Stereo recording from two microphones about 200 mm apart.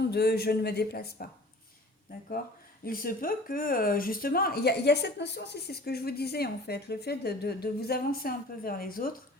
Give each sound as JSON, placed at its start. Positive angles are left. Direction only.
{"t": 0.1, "sound": "speech", "side_deg": 50}